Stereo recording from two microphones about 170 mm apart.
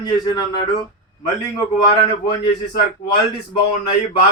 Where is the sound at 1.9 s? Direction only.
25° left (ahead or behind).